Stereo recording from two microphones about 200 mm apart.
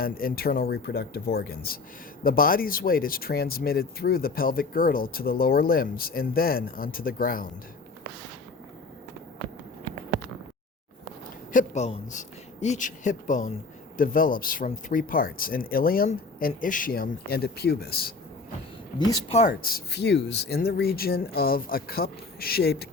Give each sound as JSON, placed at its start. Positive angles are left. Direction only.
{"t": 0.0, "sound": "speech", "side_deg": 45}
{"t": 11.5, "sound": "speech", "side_deg": 35}
{"t": 19.3, "sound": "speech", "side_deg": 35}
{"t": 19.6, "sound": "speech", "side_deg": 55}